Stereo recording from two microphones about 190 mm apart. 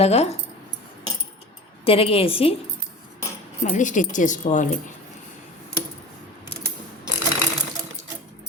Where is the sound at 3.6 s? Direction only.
40° left (ahead or behind).